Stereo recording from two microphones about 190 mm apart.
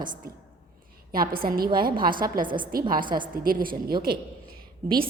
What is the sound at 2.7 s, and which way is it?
Speech, 50° right (ahead or behind).